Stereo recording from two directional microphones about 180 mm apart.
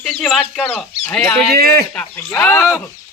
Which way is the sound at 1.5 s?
60° right (ahead or behind).